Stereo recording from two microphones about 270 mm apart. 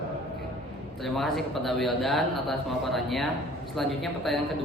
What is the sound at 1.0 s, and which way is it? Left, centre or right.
A man's voice, centre.